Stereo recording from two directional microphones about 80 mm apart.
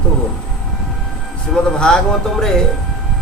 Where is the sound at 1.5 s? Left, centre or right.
Centre.